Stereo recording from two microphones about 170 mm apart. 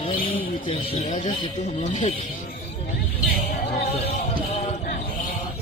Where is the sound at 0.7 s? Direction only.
35° left (ahead or behind).